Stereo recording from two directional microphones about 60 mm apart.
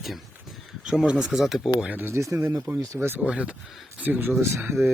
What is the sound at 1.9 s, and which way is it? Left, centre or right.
Speech, right.